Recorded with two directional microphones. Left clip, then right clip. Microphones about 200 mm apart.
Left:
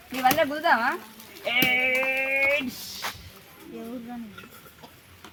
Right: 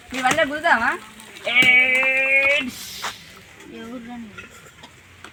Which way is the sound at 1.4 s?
15° right (ahead or behind).